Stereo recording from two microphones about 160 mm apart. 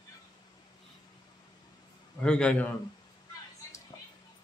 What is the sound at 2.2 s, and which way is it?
Speech, 5° left (ahead or behind).